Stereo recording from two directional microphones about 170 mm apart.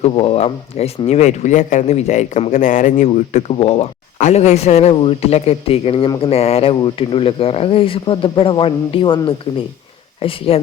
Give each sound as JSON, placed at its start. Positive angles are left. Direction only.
{"t": 0.0, "sound": "speech", "side_deg": 35}